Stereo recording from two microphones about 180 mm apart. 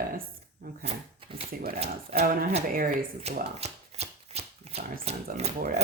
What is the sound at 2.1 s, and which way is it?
Speech, 55° right (ahead or behind).